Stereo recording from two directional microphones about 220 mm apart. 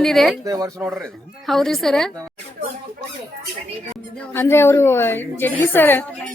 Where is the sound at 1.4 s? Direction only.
Centre (ahead or behind).